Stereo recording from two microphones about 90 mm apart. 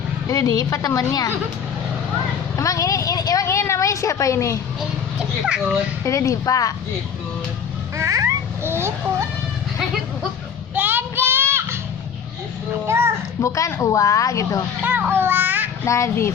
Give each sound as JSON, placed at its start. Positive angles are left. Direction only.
{"t": 0.3, "sound": "a woman's voice", "side_deg": 40}
{"t": 2.6, "sound": "a woman's voice", "side_deg": 35}
{"t": 3.4, "sound": "a woman's voice", "side_deg": 30}
{"t": 5.5, "sound": "a child's voice", "side_deg": -10}
{"t": 6.1, "sound": "a woman's voice", "side_deg": 35}
{"t": 7.9, "sound": "babbling", "side_deg": -35}
{"t": 10.8, "sound": "child singing", "side_deg": -20}
{"t": 13.4, "sound": "a woman's voice", "side_deg": 35}
{"t": 14.8, "sound": "a child's voice", "side_deg": -20}
{"t": 15.9, "sound": "a woman's voice", "side_deg": 30}